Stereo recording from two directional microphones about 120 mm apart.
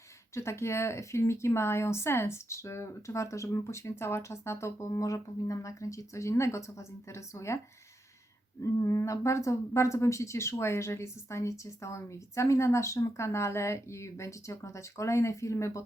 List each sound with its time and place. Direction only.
0.3 s speech: 25° left (ahead or behind)
8.6 s speech: 25° left (ahead or behind)